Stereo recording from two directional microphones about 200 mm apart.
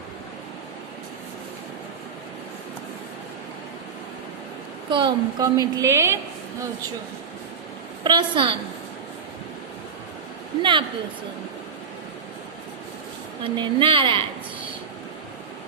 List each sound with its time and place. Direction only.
4.9 s a woman's voice: 25° right (ahead or behind)
8.0 s a woman's voice: 25° right (ahead or behind)
10.6 s a woman's voice: 25° right (ahead or behind)
13.4 s a woman's voice: 25° right (ahead or behind)